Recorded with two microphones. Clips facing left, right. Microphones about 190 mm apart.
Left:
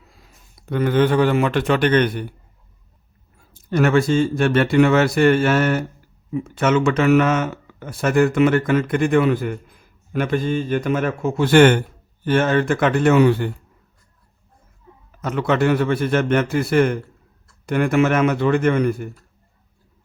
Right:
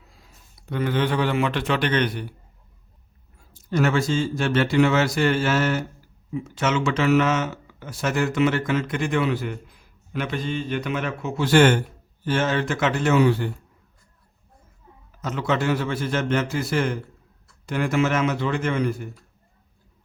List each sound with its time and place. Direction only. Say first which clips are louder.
0.6 s speech: left 6 dB; 50° left (ahead or behind)
3.5 s speech: left 5 dB; 60° left (ahead or behind)
15.2 s speech: left 5 dB; 60° left (ahead or behind)